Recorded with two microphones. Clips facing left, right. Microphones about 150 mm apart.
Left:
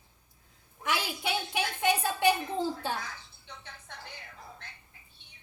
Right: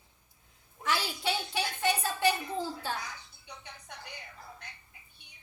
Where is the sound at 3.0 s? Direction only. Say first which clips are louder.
Even; 15° right (ahead or behind).